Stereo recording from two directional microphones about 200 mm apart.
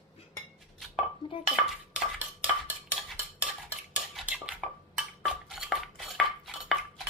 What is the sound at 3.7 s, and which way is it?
Cutlery, 5° right (ahead or behind).